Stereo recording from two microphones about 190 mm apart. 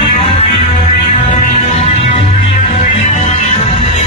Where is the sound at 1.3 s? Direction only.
35° left (ahead or behind).